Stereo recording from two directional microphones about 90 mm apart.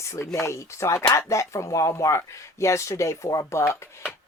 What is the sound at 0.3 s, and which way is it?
Speech, 30° left (ahead or behind).